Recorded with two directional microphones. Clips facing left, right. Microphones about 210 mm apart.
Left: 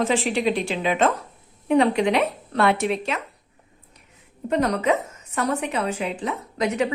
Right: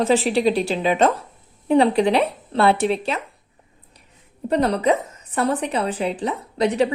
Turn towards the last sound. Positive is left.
turn(degrees=-35)  # may be behind; listen again after turning